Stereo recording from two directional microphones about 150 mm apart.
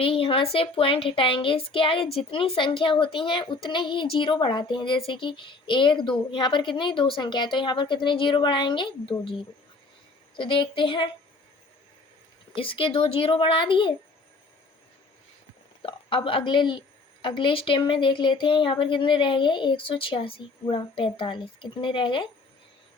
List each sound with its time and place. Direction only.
0.0 s speech: 35° left (ahead or behind)
10.3 s speech: 35° left (ahead or behind)
12.5 s speech: 35° left (ahead or behind)
15.8 s a woman's voice: 35° left (ahead or behind)